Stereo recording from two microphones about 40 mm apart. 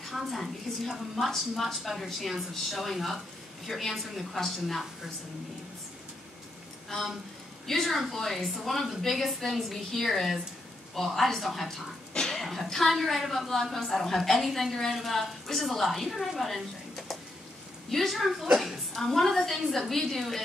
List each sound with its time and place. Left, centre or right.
0.0 s a woman's voice: centre
7.6 s a woman's voice: centre
12.1 s a sound: centre
12.4 s a woman's voice: centre